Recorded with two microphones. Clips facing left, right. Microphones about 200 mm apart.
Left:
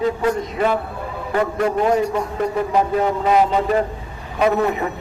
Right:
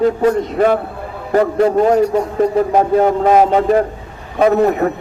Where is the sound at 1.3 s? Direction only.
35° right (ahead or behind).